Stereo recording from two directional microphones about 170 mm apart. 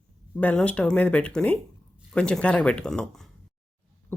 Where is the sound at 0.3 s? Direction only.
10° left (ahead or behind).